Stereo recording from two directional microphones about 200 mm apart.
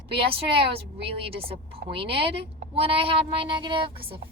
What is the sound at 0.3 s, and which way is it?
A woman's voice, 30° right (ahead or behind).